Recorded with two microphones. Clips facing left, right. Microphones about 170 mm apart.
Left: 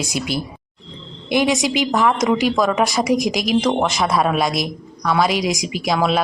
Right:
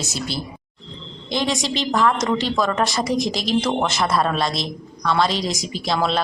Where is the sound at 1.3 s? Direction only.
15° left (ahead or behind).